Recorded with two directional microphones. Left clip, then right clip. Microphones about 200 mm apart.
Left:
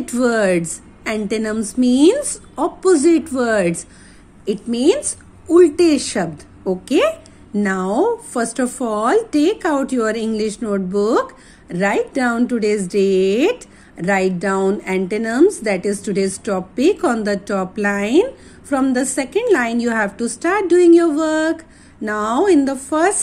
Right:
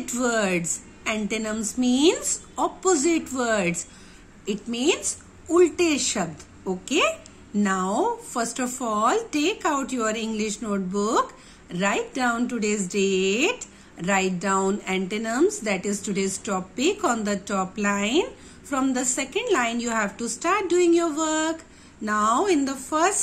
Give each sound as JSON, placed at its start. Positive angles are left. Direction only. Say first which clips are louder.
{"t": 0.0, "sound": "speech", "louder": "left 8 dB", "side_deg": 25}